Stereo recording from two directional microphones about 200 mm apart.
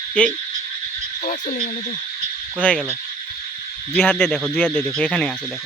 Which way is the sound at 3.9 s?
5° left (ahead or behind).